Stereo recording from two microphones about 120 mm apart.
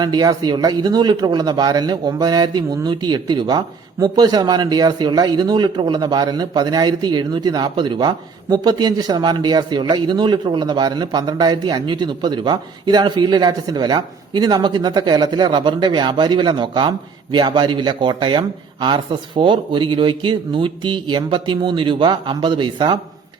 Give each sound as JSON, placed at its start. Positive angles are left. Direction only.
{"t": 0.0, "sound": "speech", "side_deg": -35}